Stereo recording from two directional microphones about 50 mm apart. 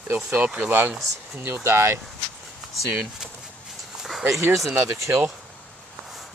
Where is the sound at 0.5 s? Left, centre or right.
Right.